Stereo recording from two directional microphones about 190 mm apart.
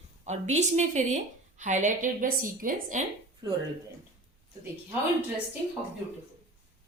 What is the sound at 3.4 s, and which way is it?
Speech, 25° right (ahead or behind).